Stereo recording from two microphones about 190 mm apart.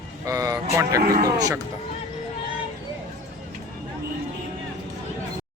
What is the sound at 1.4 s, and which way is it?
Speech, 20° right (ahead or behind).